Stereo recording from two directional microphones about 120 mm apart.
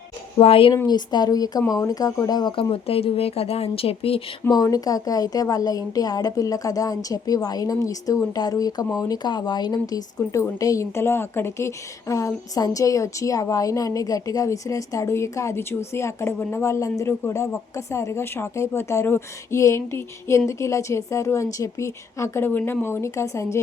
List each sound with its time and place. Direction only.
0.3 s a woman's voice: 50° left (ahead or behind)
0.9 s a woman's voice: 35° left (ahead or behind)
2.6 s speech: 50° left (ahead or behind)
4.4 s a woman's voice: 30° left (ahead or behind)